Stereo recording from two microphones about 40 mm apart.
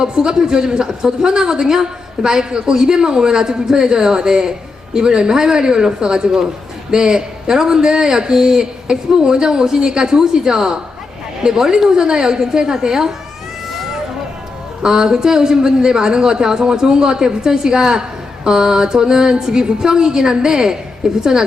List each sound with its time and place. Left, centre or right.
0.0 s a man's voice: centre
14.8 s a man's voice: centre